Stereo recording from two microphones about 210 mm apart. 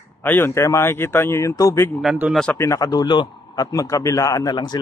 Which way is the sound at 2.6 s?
15° left (ahead or behind).